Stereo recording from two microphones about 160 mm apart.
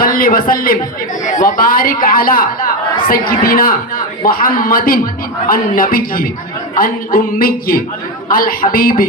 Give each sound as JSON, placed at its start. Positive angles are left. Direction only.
{"t": 0.0, "sound": "a man's voice", "side_deg": 65}